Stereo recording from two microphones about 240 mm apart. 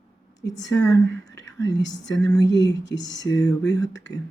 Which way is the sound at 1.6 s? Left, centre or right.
Left.